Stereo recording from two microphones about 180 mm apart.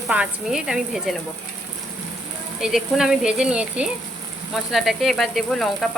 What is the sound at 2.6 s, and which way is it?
Speech, 5° right (ahead or behind).